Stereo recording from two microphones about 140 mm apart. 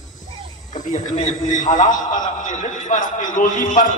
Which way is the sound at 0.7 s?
65° left (ahead or behind).